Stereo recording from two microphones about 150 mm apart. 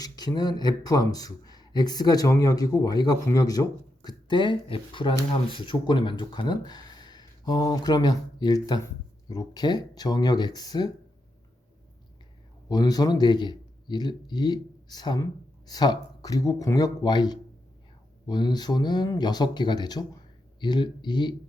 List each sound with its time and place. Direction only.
0.0 s speech: 25° left (ahead or behind)
12.6 s a man's voice: 25° left (ahead or behind)